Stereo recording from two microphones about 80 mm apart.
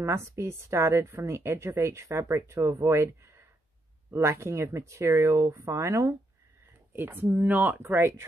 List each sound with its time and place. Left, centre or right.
0.0 s speech: right
6.9 s speech: right
7.8 s speech: right